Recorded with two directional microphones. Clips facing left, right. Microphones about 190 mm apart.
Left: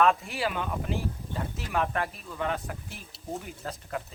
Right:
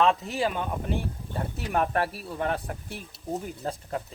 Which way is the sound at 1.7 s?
40° right (ahead or behind).